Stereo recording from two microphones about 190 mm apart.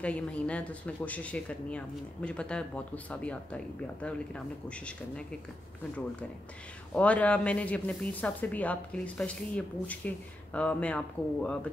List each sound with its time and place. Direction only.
0.0 s speech: 5° left (ahead or behind)
7.0 s speech: 5° left (ahead or behind)